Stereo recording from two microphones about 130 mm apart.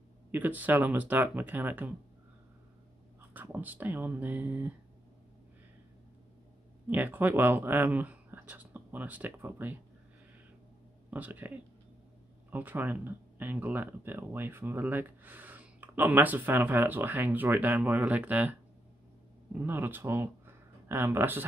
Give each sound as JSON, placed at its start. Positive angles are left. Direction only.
{"t": 0.3, "sound": "speech", "side_deg": -15}
{"t": 3.3, "sound": "speech", "side_deg": -15}
{"t": 6.9, "sound": "speech", "side_deg": -15}
{"t": 11.1, "sound": "speech", "side_deg": -10}